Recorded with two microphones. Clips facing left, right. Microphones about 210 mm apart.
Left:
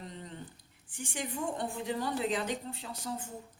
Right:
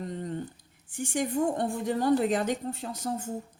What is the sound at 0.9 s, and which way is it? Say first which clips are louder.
A woman's voice: right 9 dB; 45° right (ahead or behind).